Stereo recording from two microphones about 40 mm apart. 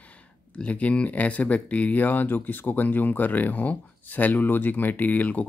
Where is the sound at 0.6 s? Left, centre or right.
Left.